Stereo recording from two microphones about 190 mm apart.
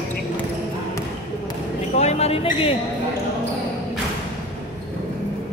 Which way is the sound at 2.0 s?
35° left (ahead or behind).